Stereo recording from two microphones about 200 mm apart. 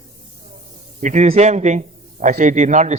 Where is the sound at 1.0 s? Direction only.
35° right (ahead or behind).